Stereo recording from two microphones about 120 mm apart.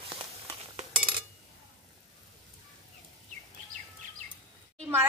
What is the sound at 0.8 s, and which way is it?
Dishes, 45° right (ahead or behind).